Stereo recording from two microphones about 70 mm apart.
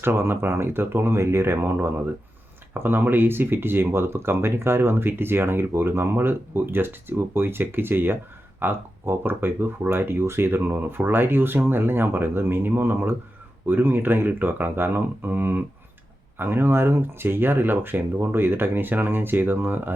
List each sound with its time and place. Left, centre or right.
0.0 s speech: right